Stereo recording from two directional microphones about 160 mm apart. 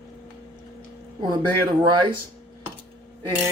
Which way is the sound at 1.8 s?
30° right (ahead or behind).